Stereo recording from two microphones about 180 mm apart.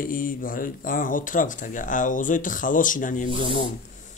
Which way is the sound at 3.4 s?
30° left (ahead or behind).